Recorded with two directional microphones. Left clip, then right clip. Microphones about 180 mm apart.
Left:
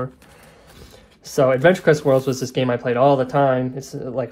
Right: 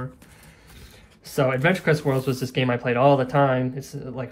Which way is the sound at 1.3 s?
15° left (ahead or behind).